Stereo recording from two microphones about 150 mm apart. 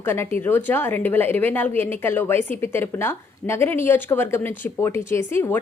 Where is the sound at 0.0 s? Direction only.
15° left (ahead or behind).